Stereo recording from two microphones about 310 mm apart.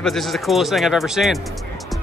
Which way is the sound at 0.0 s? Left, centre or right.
Centre.